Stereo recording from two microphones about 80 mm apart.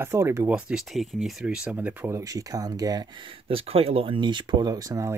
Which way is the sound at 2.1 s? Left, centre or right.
Right.